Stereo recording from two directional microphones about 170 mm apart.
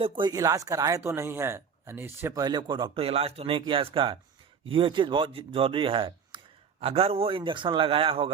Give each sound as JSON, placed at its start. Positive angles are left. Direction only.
{"t": 0.0, "sound": "a man's voice", "side_deg": -25}